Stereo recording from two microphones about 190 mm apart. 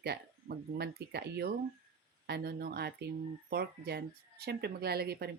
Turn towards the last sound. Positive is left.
turn(degrees=-55)  # may be behind; listen again after turning